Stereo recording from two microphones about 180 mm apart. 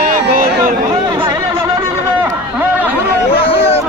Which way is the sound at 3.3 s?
30° left (ahead or behind).